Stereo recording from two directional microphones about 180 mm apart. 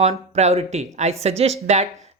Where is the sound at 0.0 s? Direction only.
35° right (ahead or behind).